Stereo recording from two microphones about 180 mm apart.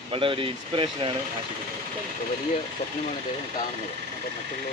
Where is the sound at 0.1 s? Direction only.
30° right (ahead or behind).